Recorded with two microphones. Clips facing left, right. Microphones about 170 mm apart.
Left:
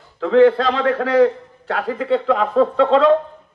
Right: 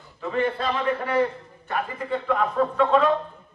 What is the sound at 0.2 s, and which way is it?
A man's voice, 90° left.